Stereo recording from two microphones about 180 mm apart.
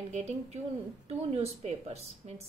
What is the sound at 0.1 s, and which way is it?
A woman's voice, 40° right (ahead or behind).